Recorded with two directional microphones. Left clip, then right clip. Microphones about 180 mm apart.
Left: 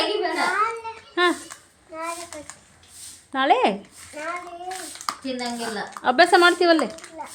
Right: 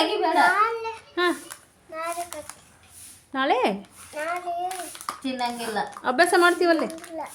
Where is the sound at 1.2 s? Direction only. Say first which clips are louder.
Left 3 dB; 10° left (ahead or behind).